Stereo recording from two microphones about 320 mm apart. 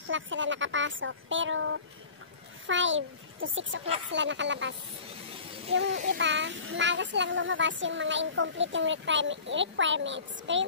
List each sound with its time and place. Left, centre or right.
0.1 s a child's voice: right
5.9 s a child's voice: right
6.1 s a child's voice: right